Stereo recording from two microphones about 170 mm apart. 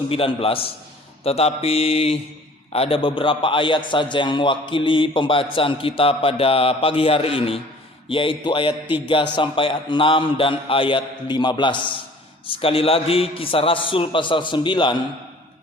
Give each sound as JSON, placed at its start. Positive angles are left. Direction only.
{"t": 0.1, "sound": "a man's voice", "side_deg": 35}